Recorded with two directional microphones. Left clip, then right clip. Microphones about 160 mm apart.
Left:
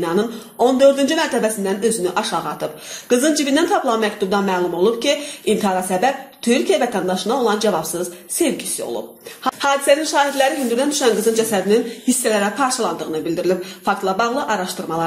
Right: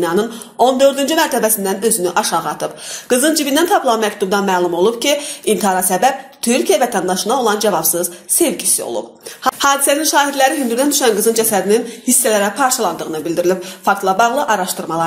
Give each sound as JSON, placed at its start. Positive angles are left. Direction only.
{"t": 0.0, "sound": "speech", "side_deg": -35}